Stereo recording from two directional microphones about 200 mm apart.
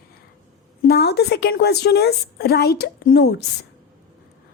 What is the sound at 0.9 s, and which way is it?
Speech, 55° left (ahead or behind).